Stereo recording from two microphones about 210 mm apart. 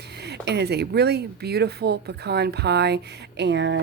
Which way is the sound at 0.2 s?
50° right (ahead or behind).